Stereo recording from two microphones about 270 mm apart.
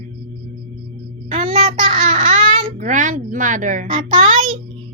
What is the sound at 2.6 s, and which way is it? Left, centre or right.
A child's voice, right.